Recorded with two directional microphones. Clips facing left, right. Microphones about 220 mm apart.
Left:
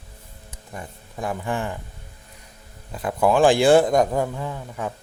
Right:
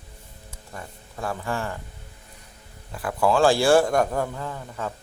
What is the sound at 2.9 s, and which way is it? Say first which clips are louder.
A man's voice: left 2 dB; 20° left (ahead or behind).